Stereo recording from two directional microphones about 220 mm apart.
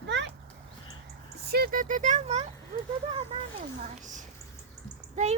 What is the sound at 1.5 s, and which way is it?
Speech, 45° right (ahead or behind).